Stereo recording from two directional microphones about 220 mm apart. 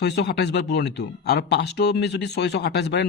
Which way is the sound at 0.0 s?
50° left (ahead or behind).